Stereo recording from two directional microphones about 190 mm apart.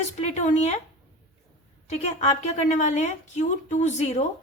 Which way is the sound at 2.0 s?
35° left (ahead or behind).